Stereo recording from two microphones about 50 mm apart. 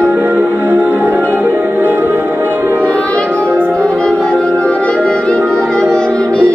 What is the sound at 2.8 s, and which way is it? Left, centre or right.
Music, left.